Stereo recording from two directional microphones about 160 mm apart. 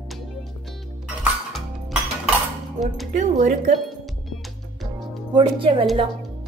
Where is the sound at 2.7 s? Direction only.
Centre (ahead or behind).